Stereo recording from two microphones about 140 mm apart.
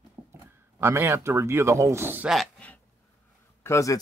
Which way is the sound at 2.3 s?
Centre (ahead or behind).